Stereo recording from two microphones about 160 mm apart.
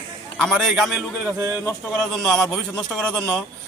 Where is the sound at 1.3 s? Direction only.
20° right (ahead or behind).